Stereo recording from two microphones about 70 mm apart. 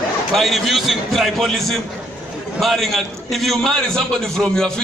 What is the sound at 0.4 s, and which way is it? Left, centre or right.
A man's voice, centre.